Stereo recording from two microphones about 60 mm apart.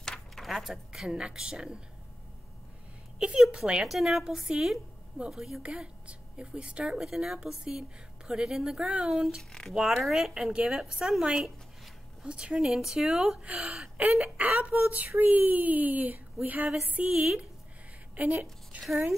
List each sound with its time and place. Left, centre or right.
0.0 s keys jangling: centre
0.5 s a woman's voice: centre
3.3 s a woman's voice: centre
7.0 s a woman's voice: centre
9.4 s speech: centre
9.9 s a woman's voice: centre
10.3 s speech: centre
12.3 s a woman's voice: centre
13.5 s speech: right
18.2 s speech: right